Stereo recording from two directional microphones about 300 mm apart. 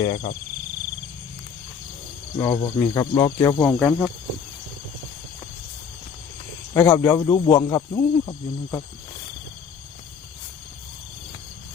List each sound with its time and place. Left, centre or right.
0.0 s speech: left
2.4 s speech: centre
3.6 s speech: centre
6.7 s speech: centre